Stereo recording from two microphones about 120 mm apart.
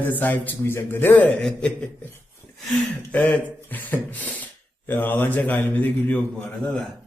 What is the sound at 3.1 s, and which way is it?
A man's voice, 10° left (ahead or behind).